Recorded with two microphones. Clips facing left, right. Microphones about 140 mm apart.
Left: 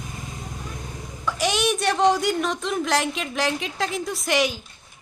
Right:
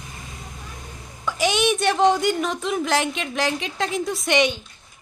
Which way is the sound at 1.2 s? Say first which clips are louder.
Right 2 dB; centre (ahead or behind).